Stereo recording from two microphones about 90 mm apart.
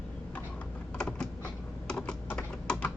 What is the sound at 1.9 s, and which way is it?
Computer keyboard, 10° left (ahead or behind).